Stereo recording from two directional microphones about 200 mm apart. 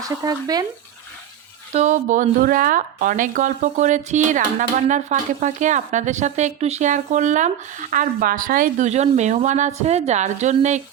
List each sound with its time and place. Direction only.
0.0 s speech: 20° right (ahead or behind)
1.7 s a woman's voice: 35° right (ahead or behind)